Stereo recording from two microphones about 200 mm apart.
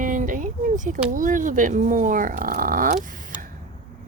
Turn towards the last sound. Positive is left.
turn(degrees=-40)  # may be behind; listen again after turning